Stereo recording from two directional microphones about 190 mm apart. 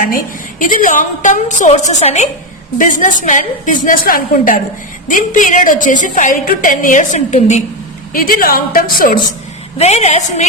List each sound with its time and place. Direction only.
0.6 s a woman's voice: 45° left (ahead or behind)
8.1 s a woman's voice: 50° left (ahead or behind)
9.7 s a woman's voice: 35° left (ahead or behind)